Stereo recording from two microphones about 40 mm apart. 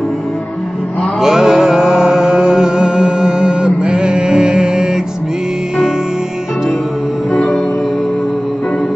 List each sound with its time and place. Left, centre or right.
1.2 s music: centre